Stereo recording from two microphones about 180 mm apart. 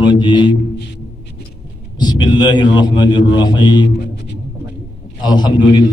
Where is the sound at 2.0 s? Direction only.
25° left (ahead or behind).